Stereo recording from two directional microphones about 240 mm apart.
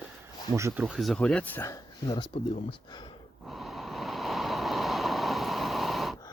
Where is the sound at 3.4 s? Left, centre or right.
Centre.